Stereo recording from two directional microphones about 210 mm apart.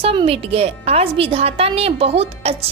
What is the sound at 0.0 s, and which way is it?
A woman's voice, 25° right (ahead or behind).